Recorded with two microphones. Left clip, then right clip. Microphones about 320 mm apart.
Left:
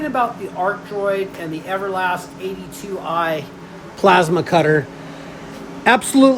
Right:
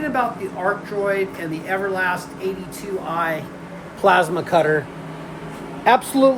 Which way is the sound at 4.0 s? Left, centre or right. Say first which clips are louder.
Left 3 dB; left.